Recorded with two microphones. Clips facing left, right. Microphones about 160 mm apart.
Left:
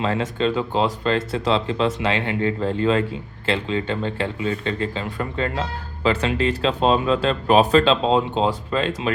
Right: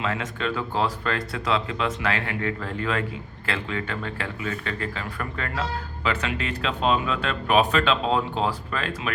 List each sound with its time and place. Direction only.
0.0 s speech: 30° left (ahead or behind)